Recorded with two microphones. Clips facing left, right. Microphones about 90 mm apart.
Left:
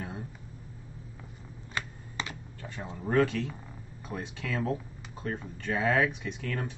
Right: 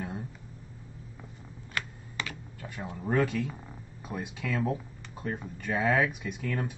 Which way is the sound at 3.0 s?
5° right (ahead or behind).